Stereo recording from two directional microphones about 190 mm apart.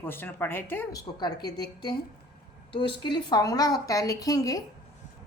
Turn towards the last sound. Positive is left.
turn(degrees=20)  # may be behind; listen again after turning